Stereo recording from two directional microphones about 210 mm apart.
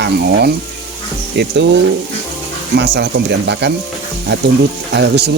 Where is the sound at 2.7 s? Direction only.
55° right (ahead or behind).